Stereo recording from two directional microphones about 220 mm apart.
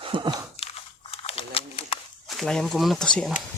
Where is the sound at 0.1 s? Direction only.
20° right (ahead or behind).